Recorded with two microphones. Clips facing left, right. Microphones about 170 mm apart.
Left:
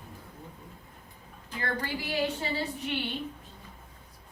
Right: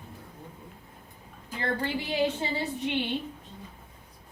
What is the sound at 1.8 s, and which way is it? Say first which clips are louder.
A woman's voice: right 4 dB; 20° right (ahead or behind).